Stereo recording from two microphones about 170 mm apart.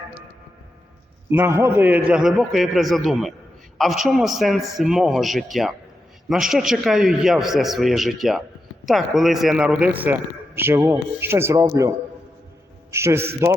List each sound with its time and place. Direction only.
1.3 s a man's voice: 15° right (ahead or behind)
12.9 s a man's voice: 15° right (ahead or behind)